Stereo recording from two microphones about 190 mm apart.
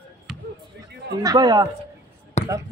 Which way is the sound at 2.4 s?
35° left (ahead or behind).